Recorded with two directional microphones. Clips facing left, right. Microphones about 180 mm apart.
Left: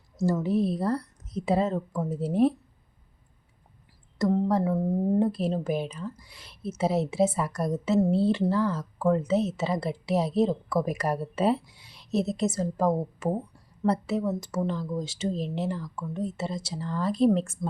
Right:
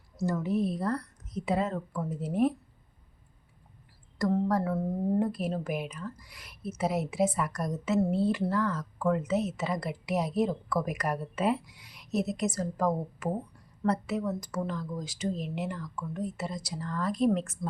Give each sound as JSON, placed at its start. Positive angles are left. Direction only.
{"t": 0.3, "sound": "speech", "side_deg": 30}
{"t": 4.2, "sound": "a woman's voice", "side_deg": 25}